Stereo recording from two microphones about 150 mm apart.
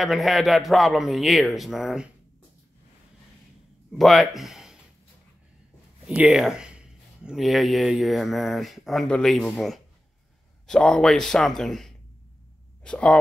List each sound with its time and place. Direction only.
0.0 s speech: centre (ahead or behind)
4.0 s speech: centre (ahead or behind)
6.0 s speech: 5° right (ahead or behind)